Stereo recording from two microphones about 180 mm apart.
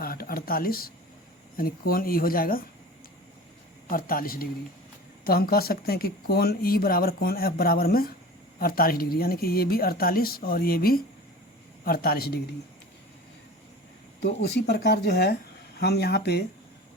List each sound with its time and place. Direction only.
0.0 s a sound: 55° left (ahead or behind)
1.5 s speech: 55° left (ahead or behind)
3.8 s speech: 55° left (ahead or behind)
14.2 s speech: 65° left (ahead or behind)